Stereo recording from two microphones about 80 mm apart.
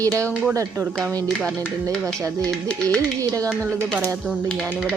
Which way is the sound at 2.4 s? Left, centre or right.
Centre.